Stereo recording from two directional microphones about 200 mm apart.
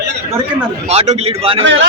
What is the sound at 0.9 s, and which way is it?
Speech, 30° right (ahead or behind).